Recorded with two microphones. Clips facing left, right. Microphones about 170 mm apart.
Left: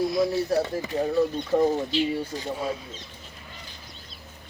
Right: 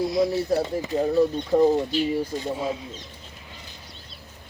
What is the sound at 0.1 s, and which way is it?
Speech, 25° right (ahead or behind).